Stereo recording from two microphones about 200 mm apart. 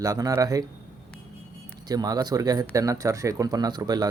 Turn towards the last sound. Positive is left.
turn(degrees=-20)  # may be behind; listen again after turning